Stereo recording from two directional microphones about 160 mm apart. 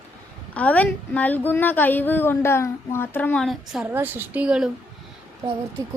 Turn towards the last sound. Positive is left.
turn(degrees=-30)  # may be behind; listen again after turning